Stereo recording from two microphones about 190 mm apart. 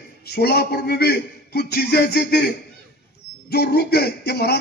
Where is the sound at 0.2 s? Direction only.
55° left (ahead or behind).